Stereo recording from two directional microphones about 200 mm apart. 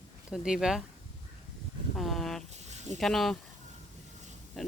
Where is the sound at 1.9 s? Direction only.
Centre (ahead or behind).